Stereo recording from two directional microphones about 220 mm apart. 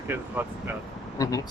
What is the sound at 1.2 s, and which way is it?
Speech, 15° left (ahead or behind).